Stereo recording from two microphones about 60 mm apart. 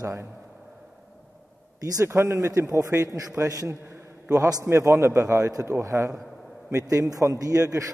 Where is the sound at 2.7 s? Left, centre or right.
Right.